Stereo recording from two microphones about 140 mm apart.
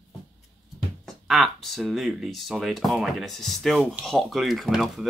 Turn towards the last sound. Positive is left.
turn(degrees=0)  # may be behind; listen again after turning